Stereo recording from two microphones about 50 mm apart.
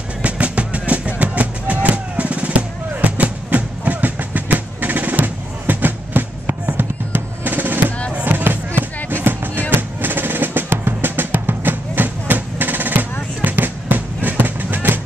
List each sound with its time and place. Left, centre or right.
0.2 s music: right
9.7 s drum: right